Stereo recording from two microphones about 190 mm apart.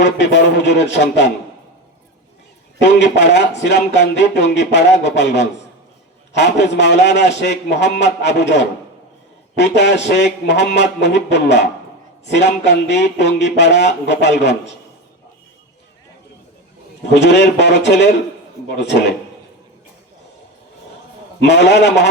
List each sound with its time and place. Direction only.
0.0 s speech: 70° left (ahead or behind)
3.0 s speech: 65° left (ahead or behind)
17.2 s speech: 65° left (ahead or behind)
21.4 s speech: 65° left (ahead or behind)